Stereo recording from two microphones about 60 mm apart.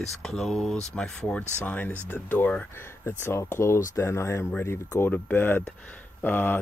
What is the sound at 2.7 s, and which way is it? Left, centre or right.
Speech, left.